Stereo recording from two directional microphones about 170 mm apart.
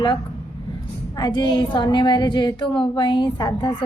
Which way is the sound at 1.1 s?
25° left (ahead or behind).